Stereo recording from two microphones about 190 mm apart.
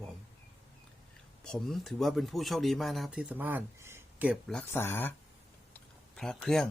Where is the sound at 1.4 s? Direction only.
Centre (ahead or behind).